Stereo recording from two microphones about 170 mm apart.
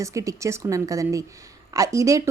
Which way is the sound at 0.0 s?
20° right (ahead or behind).